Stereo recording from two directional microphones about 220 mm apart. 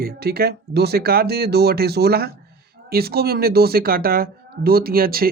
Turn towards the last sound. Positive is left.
turn(degrees=-40)  # may be behind; listen again after turning